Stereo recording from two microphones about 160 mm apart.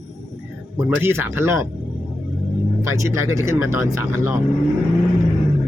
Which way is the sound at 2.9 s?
20° right (ahead or behind).